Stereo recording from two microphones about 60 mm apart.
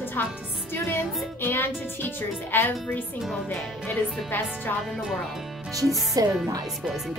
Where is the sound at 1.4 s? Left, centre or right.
Left.